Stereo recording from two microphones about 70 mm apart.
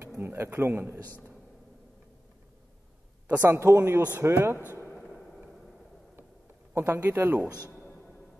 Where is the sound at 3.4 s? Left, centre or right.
Right.